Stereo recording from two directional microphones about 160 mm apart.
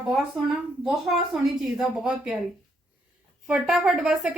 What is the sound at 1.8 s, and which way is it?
Speech, 5° right (ahead or behind).